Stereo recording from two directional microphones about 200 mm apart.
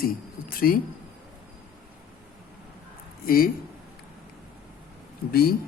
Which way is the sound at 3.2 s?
45° left (ahead or behind).